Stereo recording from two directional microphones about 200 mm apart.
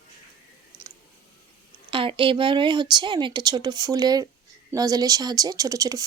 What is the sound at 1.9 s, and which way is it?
A woman's voice, 25° right (ahead or behind).